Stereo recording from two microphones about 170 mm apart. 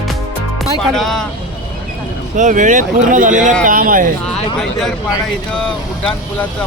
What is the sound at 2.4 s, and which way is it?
Speech, 50° right (ahead or behind).